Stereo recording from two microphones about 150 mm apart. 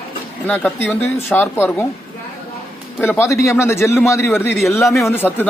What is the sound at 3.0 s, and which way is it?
A man's voice, 15° left (ahead or behind).